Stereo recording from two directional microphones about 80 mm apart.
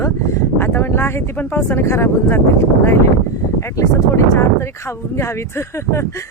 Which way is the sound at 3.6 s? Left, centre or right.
Left.